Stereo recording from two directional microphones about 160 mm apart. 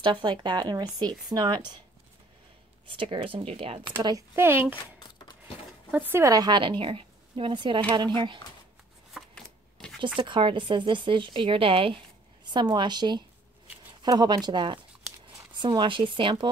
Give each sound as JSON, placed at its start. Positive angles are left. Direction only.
{"t": 0.0, "sound": "a woman's voice", "side_deg": -30}
{"t": 2.9, "sound": "speech", "side_deg": -30}
{"t": 4.4, "sound": "a child's voice", "side_deg": -15}
{"t": 5.0, "sound": "a sound", "side_deg": 25}
{"t": 5.9, "sound": "a woman's voice", "side_deg": -10}
{"t": 9.1, "sound": "shuffling cards", "side_deg": 5}
{"t": 10.1, "sound": "a woman's voice", "side_deg": -30}